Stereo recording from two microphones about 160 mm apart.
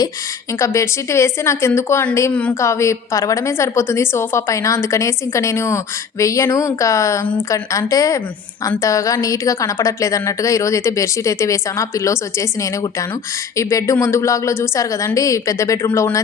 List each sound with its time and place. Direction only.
0.6 s a woman's voice: 20° left (ahead or behind)